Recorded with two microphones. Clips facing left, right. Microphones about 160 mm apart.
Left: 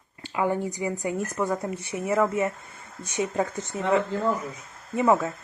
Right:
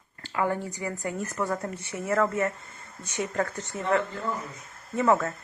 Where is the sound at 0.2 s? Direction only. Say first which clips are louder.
Left 2 dB; 15° left (ahead or behind).